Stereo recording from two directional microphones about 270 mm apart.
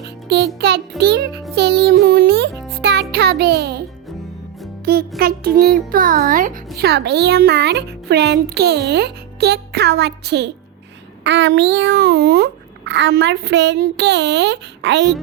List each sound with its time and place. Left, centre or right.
0.3 s a child's voice: right
2.8 s music: right
4.9 s a child's voice: right